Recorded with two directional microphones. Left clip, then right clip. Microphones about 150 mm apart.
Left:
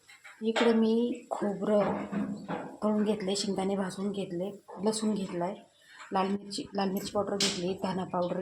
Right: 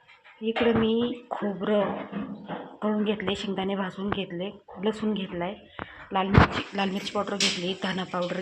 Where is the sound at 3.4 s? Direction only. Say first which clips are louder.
Right 2 dB; 15° left (ahead or behind).